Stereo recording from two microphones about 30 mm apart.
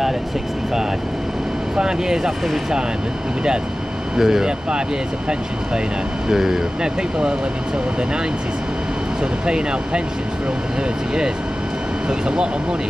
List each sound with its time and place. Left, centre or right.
1.8 s speech: right
4.2 s speech: centre
4.5 s speech: right
6.2 s speech: centre
6.8 s speech: right
9.5 s speech: right
12.1 s speech: right